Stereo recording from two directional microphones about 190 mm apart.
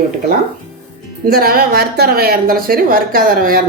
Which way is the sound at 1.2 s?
50° right (ahead or behind).